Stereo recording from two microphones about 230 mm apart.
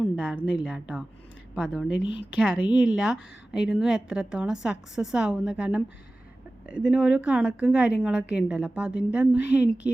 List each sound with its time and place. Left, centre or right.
0.0 s a sound: centre
0.6 s a woman's voice: centre
2.0 s speech: left
2.3 s a woman's voice: centre